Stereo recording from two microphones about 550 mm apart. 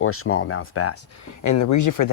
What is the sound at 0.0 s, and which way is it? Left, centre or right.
Speech, left.